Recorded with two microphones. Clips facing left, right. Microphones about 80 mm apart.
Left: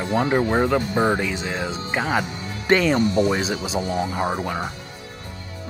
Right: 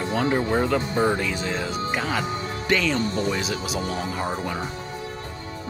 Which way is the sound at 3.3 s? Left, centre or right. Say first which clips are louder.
Left 3 dB; left.